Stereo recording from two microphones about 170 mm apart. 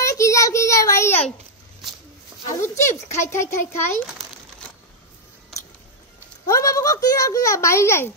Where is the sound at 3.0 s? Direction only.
15° left (ahead or behind).